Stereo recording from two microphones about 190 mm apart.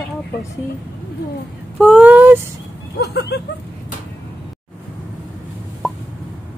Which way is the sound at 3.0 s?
60° left (ahead or behind).